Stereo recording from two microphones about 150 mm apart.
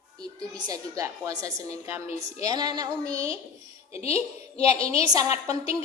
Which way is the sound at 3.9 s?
45° left (ahead or behind).